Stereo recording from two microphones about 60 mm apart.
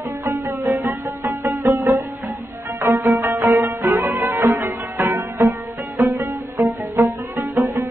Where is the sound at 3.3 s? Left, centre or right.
Right.